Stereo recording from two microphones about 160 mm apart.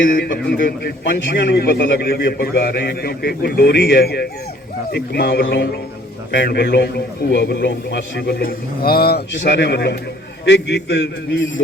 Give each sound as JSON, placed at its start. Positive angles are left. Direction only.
{"t": 0.5, "sound": "a man's voice", "side_deg": 65}
{"t": 6.3, "sound": "a man's voice", "side_deg": 90}